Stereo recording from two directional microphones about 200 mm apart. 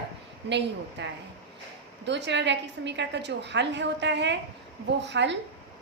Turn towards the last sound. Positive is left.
turn(degrees=-60)  # may be behind; listen again after turning